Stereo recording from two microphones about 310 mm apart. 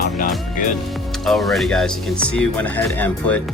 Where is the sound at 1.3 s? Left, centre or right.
Centre.